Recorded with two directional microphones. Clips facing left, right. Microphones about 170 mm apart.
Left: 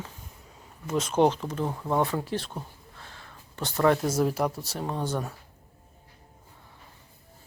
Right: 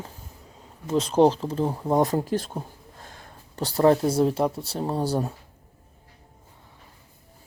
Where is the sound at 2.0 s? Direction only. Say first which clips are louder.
Right 5 dB; 40° right (ahead or behind).